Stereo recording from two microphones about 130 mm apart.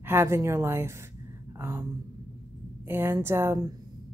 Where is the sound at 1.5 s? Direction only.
20° right (ahead or behind).